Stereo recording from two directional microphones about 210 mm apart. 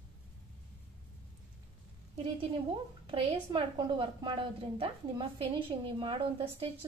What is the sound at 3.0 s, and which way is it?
A woman's voice, 25° right (ahead or behind).